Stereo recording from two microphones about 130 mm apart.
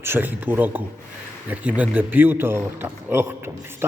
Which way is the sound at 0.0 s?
15° right (ahead or behind).